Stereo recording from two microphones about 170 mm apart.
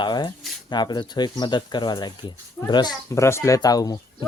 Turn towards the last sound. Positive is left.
turn(degrees=20)  # may be behind; listen again after turning